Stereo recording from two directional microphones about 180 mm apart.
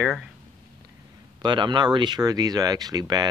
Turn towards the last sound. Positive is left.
turn(degrees=-20)  # may be behind; listen again after turning